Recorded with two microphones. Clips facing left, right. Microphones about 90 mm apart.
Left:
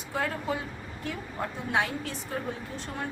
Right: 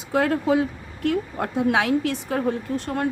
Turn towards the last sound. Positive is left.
turn(degrees=-60)  # may be behind; listen again after turning